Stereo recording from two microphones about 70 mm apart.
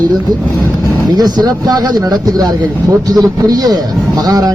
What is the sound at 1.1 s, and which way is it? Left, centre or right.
Speech, right.